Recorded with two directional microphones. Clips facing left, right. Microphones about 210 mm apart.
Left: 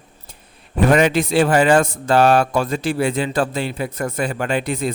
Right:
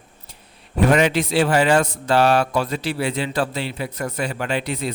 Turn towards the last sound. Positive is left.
turn(degrees=50)  # may be behind; listen again after turning